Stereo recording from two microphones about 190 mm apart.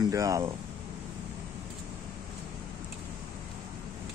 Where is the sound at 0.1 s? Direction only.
20° right (ahead or behind).